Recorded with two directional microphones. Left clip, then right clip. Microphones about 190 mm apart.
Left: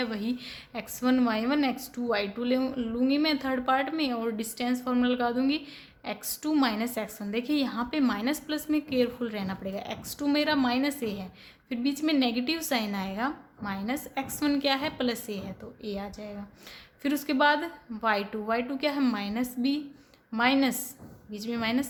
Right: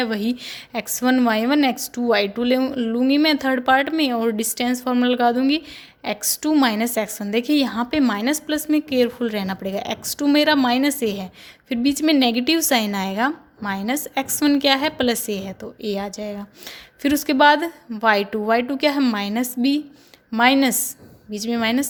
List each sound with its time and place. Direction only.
0.0 s a woman's voice: 35° right (ahead or behind)